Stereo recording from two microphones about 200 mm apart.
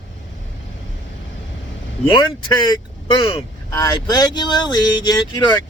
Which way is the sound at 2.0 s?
25° left (ahead or behind).